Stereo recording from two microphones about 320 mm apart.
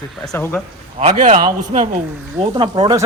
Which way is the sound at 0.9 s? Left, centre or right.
Right.